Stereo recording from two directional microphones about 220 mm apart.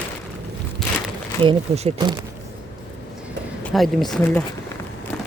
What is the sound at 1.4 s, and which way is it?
Speech, 25° right (ahead or behind).